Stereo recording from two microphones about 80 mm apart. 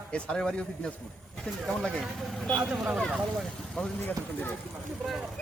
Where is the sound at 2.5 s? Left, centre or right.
Centre.